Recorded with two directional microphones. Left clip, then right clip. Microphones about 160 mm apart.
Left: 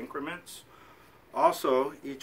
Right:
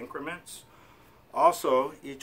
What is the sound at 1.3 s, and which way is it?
Speech, 30° right (ahead or behind).